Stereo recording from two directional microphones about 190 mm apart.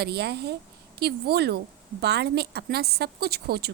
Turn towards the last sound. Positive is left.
turn(degrees=-55)  # may be behind; listen again after turning